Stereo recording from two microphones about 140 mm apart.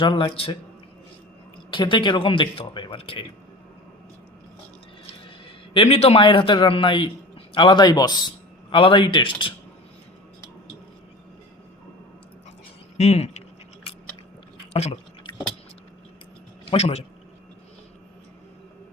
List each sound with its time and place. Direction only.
0.0 s speech: 35° left (ahead or behind)
1.7 s speech: 35° left (ahead or behind)
5.7 s a man's voice: 40° left (ahead or behind)
13.0 s speech: 50° left (ahead or behind)
14.7 s drip: 50° left (ahead or behind)
15.3 s vehicle: 35° left (ahead or behind)
16.6 s speech: 50° left (ahead or behind)